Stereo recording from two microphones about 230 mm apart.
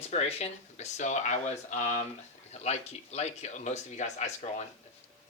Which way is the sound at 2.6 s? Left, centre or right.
Left.